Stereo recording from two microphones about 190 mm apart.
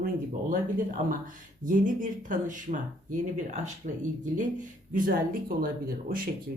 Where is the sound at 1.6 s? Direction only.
45° right (ahead or behind).